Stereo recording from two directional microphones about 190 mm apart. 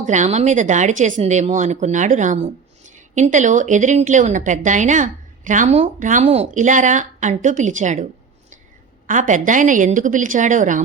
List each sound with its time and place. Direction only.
0.0 s speech: 40° right (ahead or behind)
9.0 s a woman's voice: 40° right (ahead or behind)